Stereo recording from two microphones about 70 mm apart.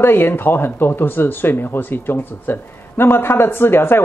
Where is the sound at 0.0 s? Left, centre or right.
Left.